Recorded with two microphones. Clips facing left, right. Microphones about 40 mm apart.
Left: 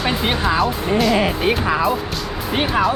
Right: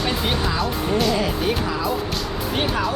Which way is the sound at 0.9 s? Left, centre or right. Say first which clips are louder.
Left 4 dB; centre.